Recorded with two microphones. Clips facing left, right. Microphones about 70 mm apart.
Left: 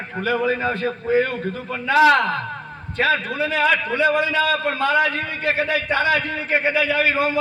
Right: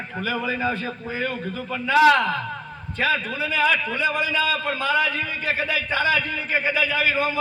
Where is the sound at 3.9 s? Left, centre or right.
Left.